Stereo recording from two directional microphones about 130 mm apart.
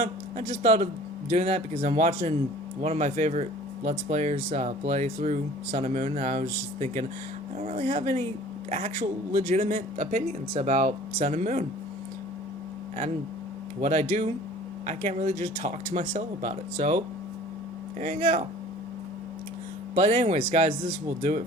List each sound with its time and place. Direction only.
0.0 s speech: 65° right (ahead or behind)
2.0 s speech: 70° right (ahead or behind)
2.8 s speech: 60° right (ahead or behind)
7.6 s speech: 60° right (ahead or behind)
11.2 s speech: 70° right (ahead or behind)
13.8 s speech: 65° right (ahead or behind)
15.9 s speech: 75° right (ahead or behind)
18.0 s speech: 65° right (ahead or behind)
20.0 s speech: 60° right (ahead or behind)